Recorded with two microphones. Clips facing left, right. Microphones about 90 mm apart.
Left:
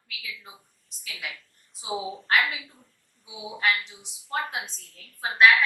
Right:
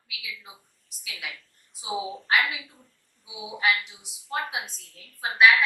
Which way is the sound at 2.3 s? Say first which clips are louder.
Even; 20° right (ahead or behind).